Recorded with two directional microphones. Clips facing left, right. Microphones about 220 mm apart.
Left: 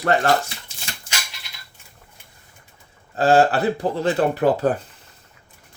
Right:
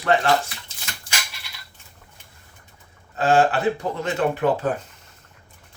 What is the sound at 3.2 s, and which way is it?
Speech, 35° left (ahead or behind).